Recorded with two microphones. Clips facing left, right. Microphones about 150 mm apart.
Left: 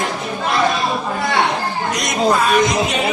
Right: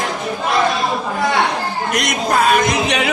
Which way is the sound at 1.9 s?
70° right (ahead or behind).